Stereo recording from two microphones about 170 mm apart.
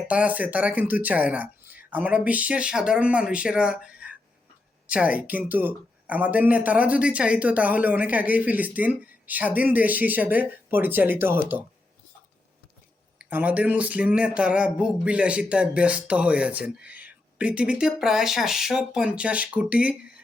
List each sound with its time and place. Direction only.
0.1 s speech: 10° right (ahead or behind)
13.1 s speech: 10° right (ahead or behind)